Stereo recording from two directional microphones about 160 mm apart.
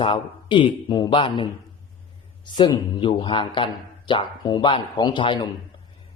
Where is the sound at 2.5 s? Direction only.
25° left (ahead or behind).